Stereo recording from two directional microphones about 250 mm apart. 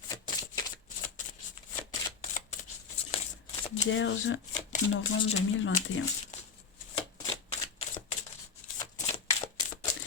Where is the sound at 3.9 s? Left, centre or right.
Left.